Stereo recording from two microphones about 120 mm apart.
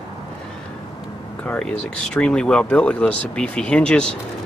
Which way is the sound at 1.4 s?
10° left (ahead or behind).